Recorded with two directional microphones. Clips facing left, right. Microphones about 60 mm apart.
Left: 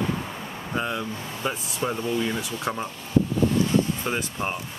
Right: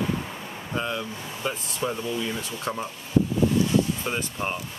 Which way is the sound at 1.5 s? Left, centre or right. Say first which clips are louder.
Left 1 dB; left.